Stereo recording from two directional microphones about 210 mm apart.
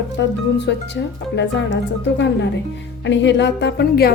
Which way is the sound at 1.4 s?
55° left (ahead or behind).